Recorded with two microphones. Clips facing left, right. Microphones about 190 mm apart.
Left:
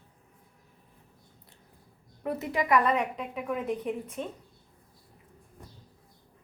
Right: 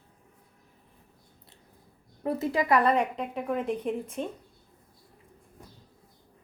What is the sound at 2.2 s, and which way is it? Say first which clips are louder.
A woman's voice: right 2 dB; 30° right (ahead or behind).